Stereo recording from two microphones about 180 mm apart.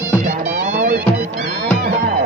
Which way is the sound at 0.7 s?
45° right (ahead or behind).